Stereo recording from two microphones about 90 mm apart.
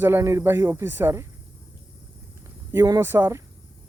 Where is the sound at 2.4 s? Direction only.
30° right (ahead or behind).